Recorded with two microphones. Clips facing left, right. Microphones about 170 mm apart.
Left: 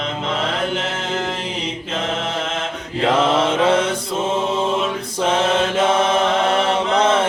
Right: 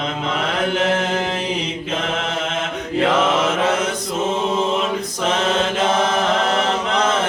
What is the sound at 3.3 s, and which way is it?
Mantra, 30° left (ahead or behind).